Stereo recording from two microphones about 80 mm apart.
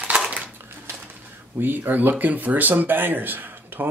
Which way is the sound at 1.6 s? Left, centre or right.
Right.